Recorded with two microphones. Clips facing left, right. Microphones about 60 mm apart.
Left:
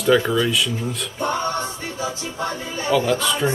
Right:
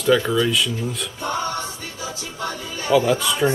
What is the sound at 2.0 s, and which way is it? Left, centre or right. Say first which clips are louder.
Music: left 3 dB; left.